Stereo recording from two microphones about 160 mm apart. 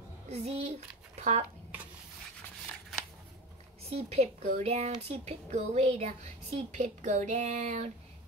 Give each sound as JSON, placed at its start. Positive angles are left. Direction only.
{"t": 0.3, "sound": "speech", "side_deg": -45}
{"t": 3.9, "sound": "speech", "side_deg": -45}